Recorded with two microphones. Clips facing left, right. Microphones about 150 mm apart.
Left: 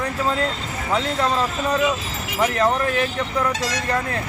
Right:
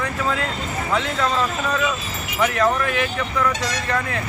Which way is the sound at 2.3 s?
30° left (ahead or behind).